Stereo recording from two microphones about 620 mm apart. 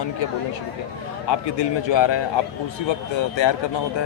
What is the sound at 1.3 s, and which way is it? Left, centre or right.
Speech, left.